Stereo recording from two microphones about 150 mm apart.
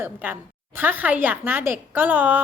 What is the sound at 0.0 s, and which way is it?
A woman's voice, 10° right (ahead or behind).